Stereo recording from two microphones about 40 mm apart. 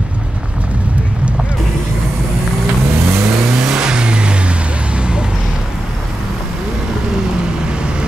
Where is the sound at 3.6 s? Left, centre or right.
Right.